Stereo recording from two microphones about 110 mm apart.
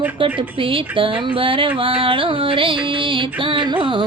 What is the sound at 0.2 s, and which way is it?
Music, 50° right (ahead or behind).